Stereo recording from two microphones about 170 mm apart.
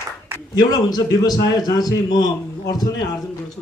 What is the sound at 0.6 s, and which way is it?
Speech, 25° left (ahead or behind).